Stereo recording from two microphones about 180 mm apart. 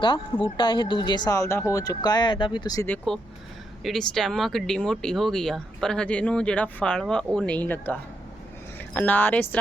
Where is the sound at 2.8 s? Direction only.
5° left (ahead or behind).